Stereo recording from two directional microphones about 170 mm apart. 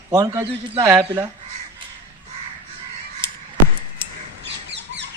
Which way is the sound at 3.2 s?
30° right (ahead or behind).